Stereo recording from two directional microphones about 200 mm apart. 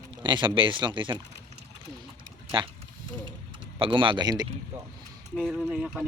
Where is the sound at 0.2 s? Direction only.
25° right (ahead or behind).